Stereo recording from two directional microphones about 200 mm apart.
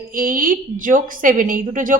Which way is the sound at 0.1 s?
45° right (ahead or behind).